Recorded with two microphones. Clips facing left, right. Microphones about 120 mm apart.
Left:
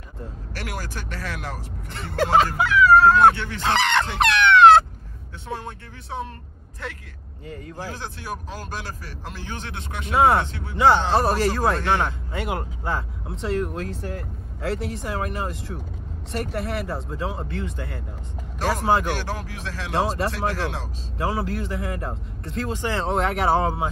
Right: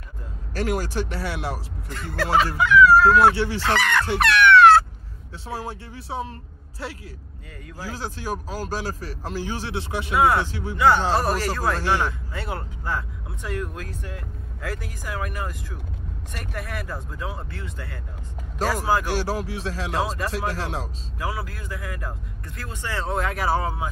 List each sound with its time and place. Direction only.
0.6 s a man's voice: 40° right (ahead or behind)
1.9 s speech: 30° left (ahead or behind)
2.4 s speech: 40° left (ahead or behind)
3.6 s speech: 25° left (ahead or behind)
4.2 s a sound: 20° left (ahead or behind)
5.5 s a man's voice: 35° right (ahead or behind)
7.4 s speech: 30° left (ahead or behind)
8.2 s a man's voice: 35° right (ahead or behind)
10.1 s speech: 30° left (ahead or behind)
19.1 s a man's voice: 35° right (ahead or behind)
19.9 s speech: 35° left (ahead or behind)
20.5 s a man's voice: 35° right (ahead or behind)
21.2 s speech: 30° left (ahead or behind)